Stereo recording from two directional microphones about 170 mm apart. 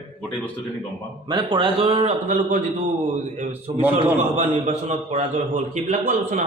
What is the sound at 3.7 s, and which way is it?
A man's voice, 40° right (ahead or behind).